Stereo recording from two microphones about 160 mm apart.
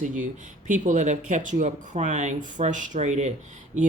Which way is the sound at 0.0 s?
50° right (ahead or behind).